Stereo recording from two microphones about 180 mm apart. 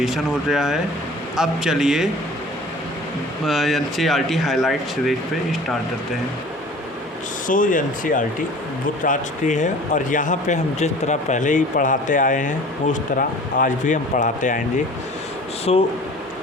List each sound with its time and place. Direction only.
0.0 s speech: centre (ahead or behind)
3.4 s speech: centre (ahead or behind)
7.4 s speech: 50° left (ahead or behind)
15.7 s speech: 35° left (ahead or behind)